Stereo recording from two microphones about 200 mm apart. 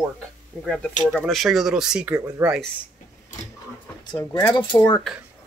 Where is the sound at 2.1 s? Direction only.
15° right (ahead or behind).